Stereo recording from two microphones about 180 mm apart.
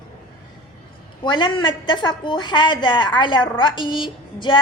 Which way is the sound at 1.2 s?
25° left (ahead or behind).